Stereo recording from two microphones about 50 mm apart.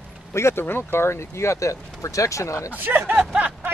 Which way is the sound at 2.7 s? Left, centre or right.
Right.